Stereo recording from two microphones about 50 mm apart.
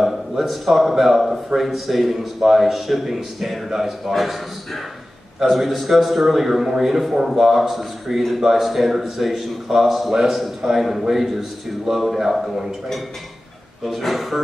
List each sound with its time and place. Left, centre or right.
0.0 s a man's voice: centre
5.4 s a man's voice: centre